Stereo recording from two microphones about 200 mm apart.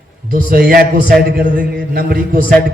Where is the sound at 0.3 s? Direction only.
45° right (ahead or behind).